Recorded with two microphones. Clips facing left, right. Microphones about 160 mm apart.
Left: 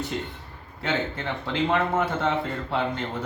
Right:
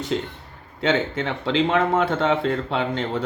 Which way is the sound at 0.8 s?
85° right.